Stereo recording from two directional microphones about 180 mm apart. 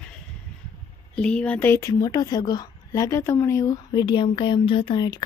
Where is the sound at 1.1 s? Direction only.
5° left (ahead or behind).